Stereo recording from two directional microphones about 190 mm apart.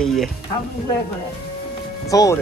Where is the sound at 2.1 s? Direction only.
20° left (ahead or behind).